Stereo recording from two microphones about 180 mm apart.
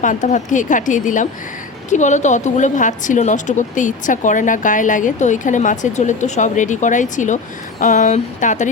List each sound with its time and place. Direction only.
0.0 s a woman's voice: 45° left (ahead or behind)